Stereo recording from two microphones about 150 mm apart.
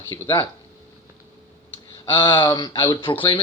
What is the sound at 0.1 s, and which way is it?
Speech, 20° left (ahead or behind).